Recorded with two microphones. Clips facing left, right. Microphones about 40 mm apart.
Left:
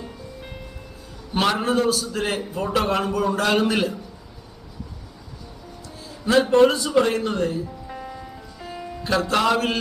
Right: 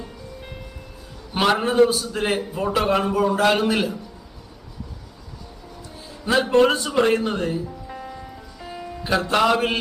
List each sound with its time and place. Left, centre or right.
1.3 s a man's voice: centre
6.5 s a man's voice: right
7.9 s music: centre
9.0 s a man's voice: centre